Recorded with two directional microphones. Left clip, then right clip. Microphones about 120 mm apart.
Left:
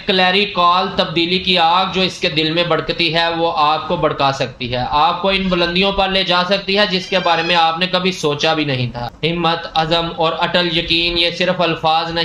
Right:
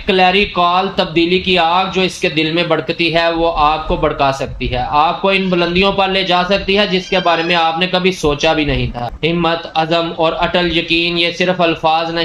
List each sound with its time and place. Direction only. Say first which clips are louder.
0.1 s speech: right 2 dB; 40° right (ahead or behind)